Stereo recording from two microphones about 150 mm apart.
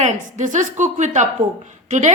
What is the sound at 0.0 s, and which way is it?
A woman's voice, 55° right (ahead or behind).